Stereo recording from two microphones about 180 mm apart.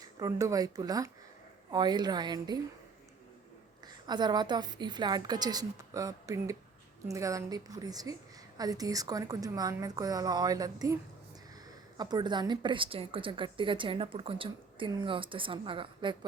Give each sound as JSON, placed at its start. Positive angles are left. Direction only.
{"t": 0.0, "sound": "a woman's voice", "side_deg": -20}
{"t": 3.8, "sound": "a woman's voice", "side_deg": -25}